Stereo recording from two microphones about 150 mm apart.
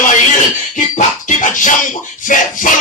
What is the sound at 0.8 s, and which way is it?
Music, 55° left (ahead or behind).